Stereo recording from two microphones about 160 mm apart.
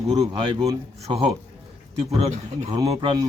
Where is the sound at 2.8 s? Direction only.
35° right (ahead or behind).